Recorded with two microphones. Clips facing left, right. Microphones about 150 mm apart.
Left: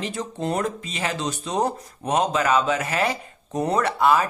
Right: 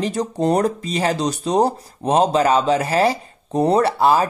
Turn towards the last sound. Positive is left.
turn(degrees=-30)  # may be behind; listen again after turning